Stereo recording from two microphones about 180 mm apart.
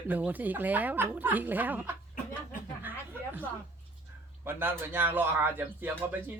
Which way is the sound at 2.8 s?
10° right (ahead or behind).